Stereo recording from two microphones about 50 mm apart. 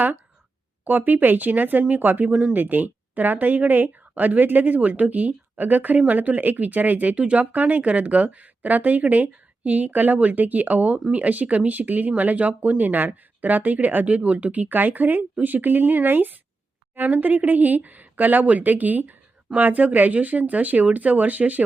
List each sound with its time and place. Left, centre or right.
0.9 s speech: right